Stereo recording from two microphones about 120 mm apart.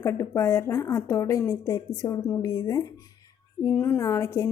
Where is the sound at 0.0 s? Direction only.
20° left (ahead or behind).